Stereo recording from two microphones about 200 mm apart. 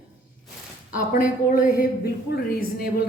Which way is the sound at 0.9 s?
40° left (ahead or behind).